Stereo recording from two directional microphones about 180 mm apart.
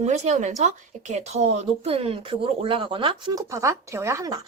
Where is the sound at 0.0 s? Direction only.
40° right (ahead or behind).